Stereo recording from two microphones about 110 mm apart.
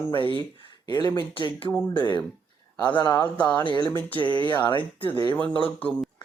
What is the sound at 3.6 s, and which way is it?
Speech, 45° left (ahead or behind).